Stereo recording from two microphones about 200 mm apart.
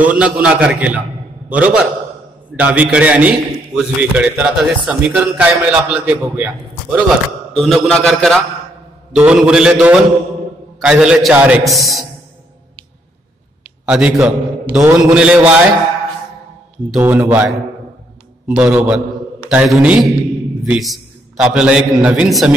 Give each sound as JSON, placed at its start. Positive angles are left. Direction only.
{"t": 0.0, "sound": "a man's voice", "side_deg": -5}
{"t": 7.5, "sound": "a man's voice", "side_deg": 0}
{"t": 13.8, "sound": "a man's voice", "side_deg": -5}
{"t": 16.9, "sound": "a man's voice", "side_deg": -10}